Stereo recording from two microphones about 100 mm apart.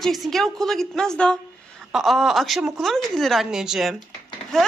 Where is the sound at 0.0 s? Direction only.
Centre (ahead or behind).